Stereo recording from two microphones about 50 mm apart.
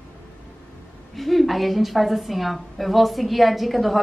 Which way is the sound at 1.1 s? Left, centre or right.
Centre.